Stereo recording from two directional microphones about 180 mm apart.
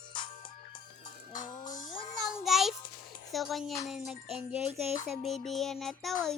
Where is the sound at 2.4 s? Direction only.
Centre (ahead or behind).